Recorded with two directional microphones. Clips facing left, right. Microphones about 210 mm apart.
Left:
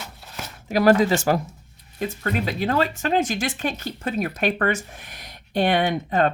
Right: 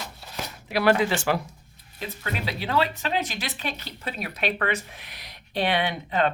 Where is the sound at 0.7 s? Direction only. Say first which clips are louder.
Left 5 dB; 40° left (ahead or behind).